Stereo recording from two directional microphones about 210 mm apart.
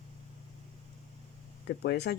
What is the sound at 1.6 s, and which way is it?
Speech, 55° left (ahead or behind).